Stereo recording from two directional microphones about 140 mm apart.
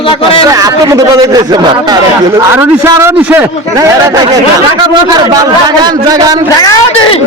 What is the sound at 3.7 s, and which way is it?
A man's voice, 25° right (ahead or behind).